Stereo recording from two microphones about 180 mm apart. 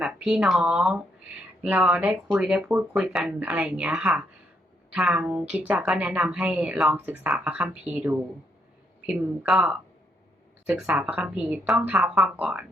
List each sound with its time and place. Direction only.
0.0 s a woman's voice: 5° right (ahead or behind)